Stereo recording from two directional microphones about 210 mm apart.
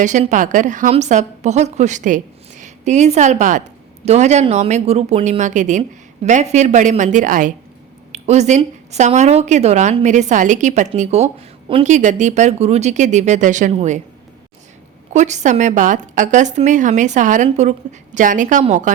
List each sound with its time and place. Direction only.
0.0 s a woman's voice: 35° right (ahead or behind)
15.1 s a woman's voice: 35° right (ahead or behind)